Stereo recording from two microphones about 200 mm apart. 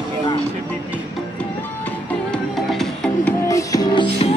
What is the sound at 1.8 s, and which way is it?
Music, 5° left (ahead or behind).